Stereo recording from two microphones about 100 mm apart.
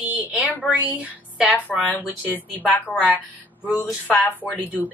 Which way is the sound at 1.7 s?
Centre (ahead or behind).